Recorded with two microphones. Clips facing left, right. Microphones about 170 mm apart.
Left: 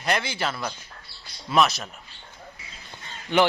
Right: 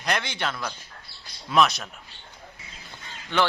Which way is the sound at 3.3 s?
15° left (ahead or behind).